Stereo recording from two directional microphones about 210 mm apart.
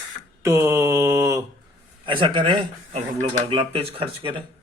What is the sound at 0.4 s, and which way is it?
Mantra, 10° right (ahead or behind).